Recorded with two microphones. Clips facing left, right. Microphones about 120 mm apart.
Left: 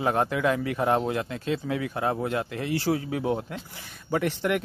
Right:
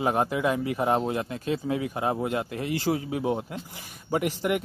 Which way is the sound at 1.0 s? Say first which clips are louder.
Even; 25° right (ahead or behind).